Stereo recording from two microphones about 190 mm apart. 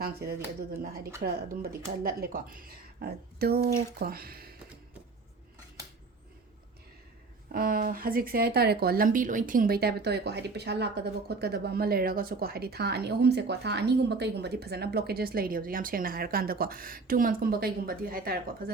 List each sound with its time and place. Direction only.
0.0 s speech: 55° right (ahead or behind)
2.0 s speech: 50° right (ahead or behind)
7.5 s speech: 50° right (ahead or behind)